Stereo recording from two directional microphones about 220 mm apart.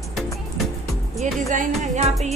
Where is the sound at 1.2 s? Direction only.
35° right (ahead or behind).